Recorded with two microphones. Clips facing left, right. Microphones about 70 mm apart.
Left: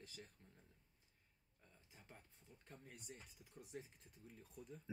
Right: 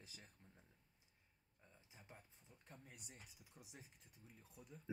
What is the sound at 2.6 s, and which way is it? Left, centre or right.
Speech, centre.